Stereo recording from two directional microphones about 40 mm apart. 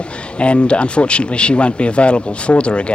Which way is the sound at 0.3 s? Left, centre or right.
Left.